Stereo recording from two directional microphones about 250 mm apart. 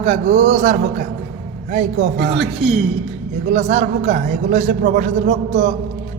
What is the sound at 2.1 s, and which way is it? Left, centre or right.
Speech, right.